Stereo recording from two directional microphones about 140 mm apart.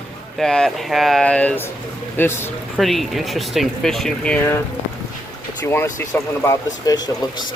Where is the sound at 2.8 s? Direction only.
Centre (ahead or behind).